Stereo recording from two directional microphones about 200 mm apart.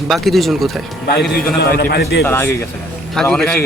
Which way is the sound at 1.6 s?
50° left (ahead or behind).